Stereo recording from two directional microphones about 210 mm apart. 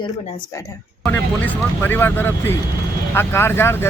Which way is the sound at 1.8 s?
10° left (ahead or behind).